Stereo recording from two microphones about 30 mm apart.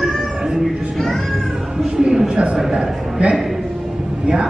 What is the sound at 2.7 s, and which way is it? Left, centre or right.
Speech, right.